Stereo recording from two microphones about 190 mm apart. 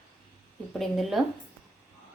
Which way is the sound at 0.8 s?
Centre (ahead or behind).